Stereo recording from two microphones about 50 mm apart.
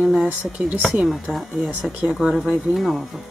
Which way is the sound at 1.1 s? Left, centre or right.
Centre.